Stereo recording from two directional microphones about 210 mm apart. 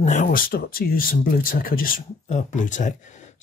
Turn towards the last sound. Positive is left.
turn(degrees=35)  # may be behind; listen again after turning